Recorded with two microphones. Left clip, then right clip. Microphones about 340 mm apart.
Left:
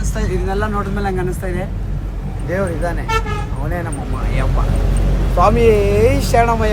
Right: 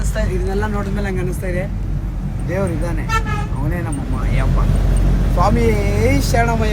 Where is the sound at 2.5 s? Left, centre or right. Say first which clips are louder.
Left 2 dB; centre.